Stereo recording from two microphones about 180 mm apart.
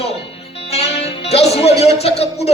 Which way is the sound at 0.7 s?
35° left (ahead or behind).